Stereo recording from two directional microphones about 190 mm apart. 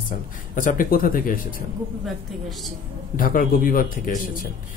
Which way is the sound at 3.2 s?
45° left (ahead or behind).